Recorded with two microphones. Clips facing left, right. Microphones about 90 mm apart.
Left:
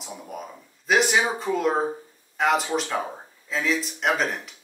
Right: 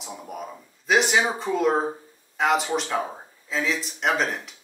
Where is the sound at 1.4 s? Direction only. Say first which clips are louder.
Right 1 dB; centre (ahead or behind).